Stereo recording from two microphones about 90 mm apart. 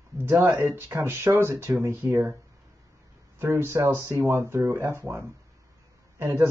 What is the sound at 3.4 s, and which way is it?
Speech, 30° right (ahead or behind).